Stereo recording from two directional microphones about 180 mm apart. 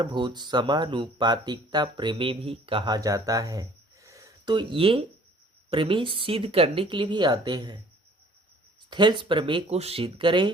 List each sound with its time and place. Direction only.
0.0 s speech: 25° right (ahead or behind)
8.9 s speech: 25° right (ahead or behind)